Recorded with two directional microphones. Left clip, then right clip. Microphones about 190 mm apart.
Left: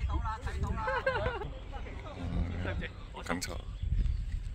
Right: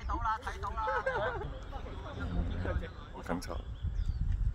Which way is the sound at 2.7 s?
60° right (ahead or behind).